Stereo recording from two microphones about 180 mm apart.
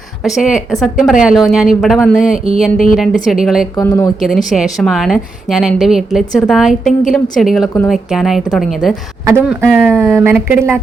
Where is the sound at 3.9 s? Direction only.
15° left (ahead or behind).